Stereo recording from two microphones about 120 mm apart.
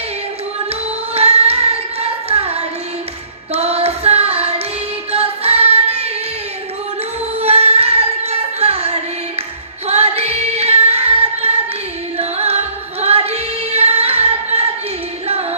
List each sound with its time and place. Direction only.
1.1 s music: 60° right (ahead or behind)
2.0 s carnatic music: 60° right (ahead or behind)
3.5 s child singing: 65° right (ahead or behind)
5.1 s music: 60° right (ahead or behind)
7.3 s singing: 60° right (ahead or behind)
9.8 s female singing: 60° right (ahead or behind)
12.1 s music: 60° right (ahead or behind)